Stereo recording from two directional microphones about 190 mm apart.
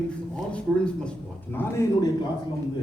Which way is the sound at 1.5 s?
20° left (ahead or behind).